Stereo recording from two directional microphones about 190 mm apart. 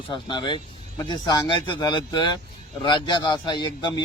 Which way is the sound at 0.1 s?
25° left (ahead or behind).